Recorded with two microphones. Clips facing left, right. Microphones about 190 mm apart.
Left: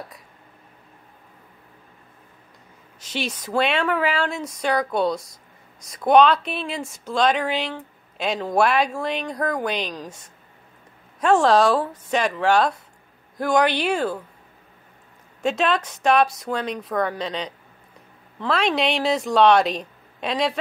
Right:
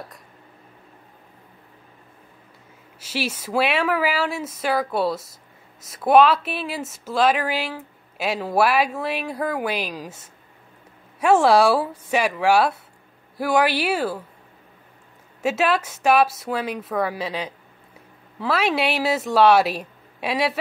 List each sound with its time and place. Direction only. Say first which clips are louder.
3.0 s a woman's voice: right 1 dB; 5° right (ahead or behind)
15.4 s a woman's voice: right 1 dB; 5° right (ahead or behind)